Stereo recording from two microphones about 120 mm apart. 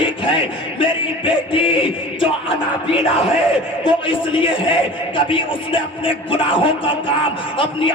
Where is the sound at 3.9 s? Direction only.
45° left (ahead or behind).